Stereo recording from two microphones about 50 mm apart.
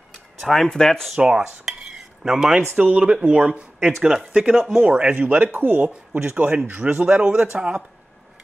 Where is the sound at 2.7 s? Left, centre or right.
Right.